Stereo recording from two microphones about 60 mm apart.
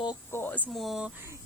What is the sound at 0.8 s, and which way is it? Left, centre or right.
Speech, centre.